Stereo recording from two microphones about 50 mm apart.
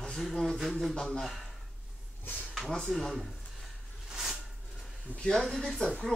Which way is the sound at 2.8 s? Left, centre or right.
Centre.